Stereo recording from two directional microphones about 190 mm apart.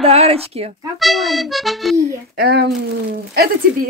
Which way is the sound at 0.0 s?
30° right (ahead or behind).